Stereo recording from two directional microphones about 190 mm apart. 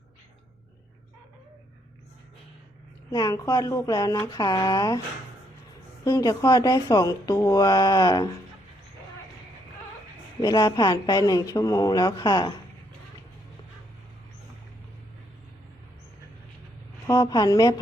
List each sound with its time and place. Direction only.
3.1 s speech: 20° left (ahead or behind)
6.1 s speech: 20° left (ahead or behind)
10.4 s speech: 20° left (ahead or behind)
17.1 s speech: 20° left (ahead or behind)